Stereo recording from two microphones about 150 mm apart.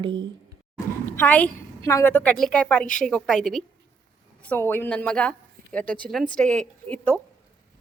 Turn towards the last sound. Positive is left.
turn(degrees=10)  # may be behind; listen again after turning